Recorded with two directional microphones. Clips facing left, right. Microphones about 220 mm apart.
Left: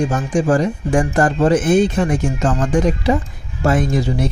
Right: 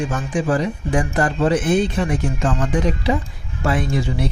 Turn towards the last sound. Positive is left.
turn(degrees=45)  # may be behind; listen again after turning